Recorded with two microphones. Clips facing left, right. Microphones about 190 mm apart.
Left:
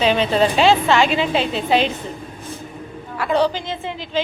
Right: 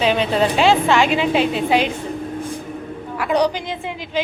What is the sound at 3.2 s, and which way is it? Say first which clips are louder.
A woman's voice: even; 15° right (ahead or behind).